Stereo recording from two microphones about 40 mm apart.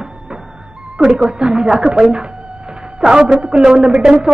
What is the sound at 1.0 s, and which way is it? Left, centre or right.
Speech, right.